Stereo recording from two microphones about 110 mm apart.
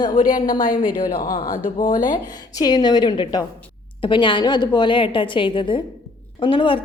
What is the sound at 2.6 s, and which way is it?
A woman's voice, 40° left (ahead or behind).